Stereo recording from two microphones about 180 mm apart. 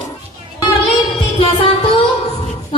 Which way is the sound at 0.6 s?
30° left (ahead or behind).